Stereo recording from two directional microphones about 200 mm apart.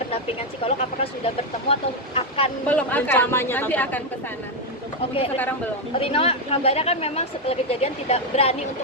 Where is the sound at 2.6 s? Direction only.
10° left (ahead or behind).